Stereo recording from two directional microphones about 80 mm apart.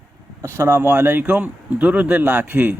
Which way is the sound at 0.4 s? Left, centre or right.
Right.